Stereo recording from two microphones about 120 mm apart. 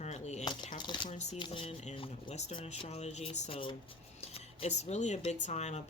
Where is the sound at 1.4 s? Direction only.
50° left (ahead or behind).